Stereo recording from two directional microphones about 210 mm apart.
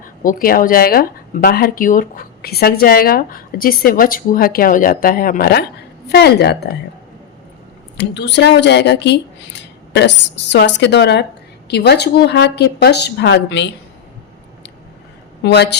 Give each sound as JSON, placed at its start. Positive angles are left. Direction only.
{"t": 0.2, "sound": "speech", "side_deg": 40}
{"t": 7.9, "sound": "speech", "side_deg": 55}
{"t": 15.4, "sound": "speech", "side_deg": 50}